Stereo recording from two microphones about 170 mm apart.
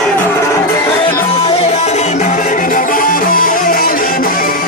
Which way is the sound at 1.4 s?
35° left (ahead or behind).